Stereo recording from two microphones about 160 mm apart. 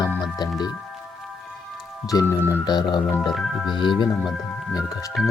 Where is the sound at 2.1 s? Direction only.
25° left (ahead or behind).